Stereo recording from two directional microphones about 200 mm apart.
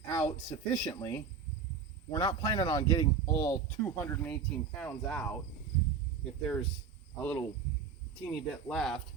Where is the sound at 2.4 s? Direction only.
20° left (ahead or behind).